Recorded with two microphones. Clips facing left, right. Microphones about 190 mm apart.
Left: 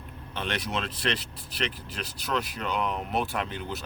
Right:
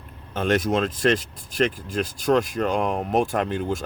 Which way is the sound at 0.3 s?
45° right (ahead or behind).